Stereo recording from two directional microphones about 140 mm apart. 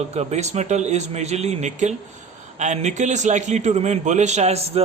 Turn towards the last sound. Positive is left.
turn(degrees=-50)  # may be behind; listen again after turning